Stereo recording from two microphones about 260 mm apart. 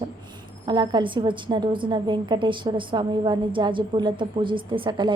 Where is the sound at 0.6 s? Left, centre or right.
Centre.